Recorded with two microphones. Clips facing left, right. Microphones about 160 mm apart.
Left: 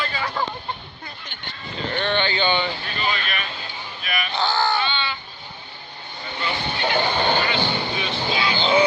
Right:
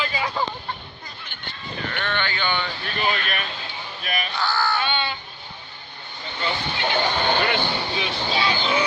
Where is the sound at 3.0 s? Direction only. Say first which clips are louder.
Right 2 dB; 50° right (ahead or behind).